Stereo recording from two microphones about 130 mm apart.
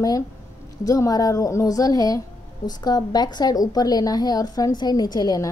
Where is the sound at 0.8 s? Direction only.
25° left (ahead or behind).